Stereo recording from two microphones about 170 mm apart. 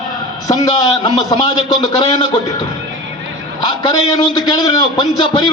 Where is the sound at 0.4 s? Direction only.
20° left (ahead or behind).